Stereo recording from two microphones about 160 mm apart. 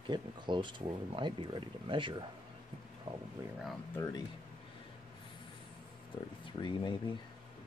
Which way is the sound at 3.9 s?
20° left (ahead or behind).